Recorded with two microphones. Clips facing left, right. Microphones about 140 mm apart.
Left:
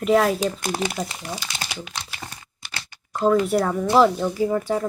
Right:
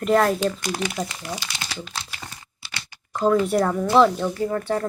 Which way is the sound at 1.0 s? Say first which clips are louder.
Even; 10° right (ahead or behind).